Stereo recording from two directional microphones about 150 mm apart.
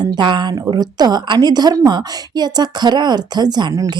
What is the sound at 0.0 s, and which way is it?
A woman's voice, 30° right (ahead or behind).